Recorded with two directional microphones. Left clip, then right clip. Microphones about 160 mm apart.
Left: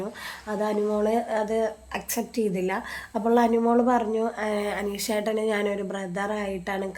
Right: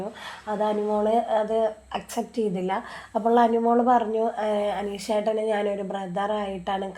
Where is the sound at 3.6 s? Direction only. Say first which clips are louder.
Right 2 dB; 15° left (ahead or behind).